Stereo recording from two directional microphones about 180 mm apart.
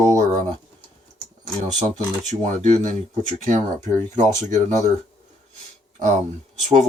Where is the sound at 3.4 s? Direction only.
45° right (ahead or behind).